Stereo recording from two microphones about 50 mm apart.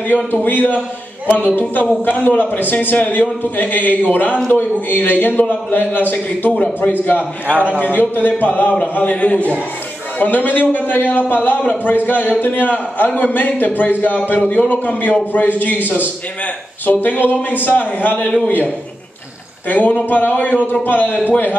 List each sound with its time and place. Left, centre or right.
0.3 s a man's voice: left
6.5 s a man's voice: left
6.9 s a man's voice: left
7.4 s a man's voice: right
8.0 s a man's voice: left
10.1 s a man's voice: left
16.8 s a man's voice: left
19.7 s a man's voice: left